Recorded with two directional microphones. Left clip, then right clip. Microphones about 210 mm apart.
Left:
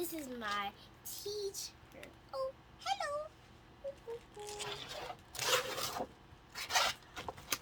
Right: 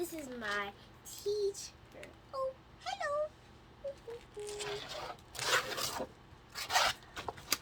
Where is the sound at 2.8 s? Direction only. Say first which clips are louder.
Left 1 dB; 40° left (ahead or behind).